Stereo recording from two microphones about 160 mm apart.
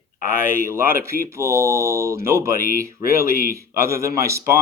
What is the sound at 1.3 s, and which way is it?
Speech, 15° right (ahead or behind).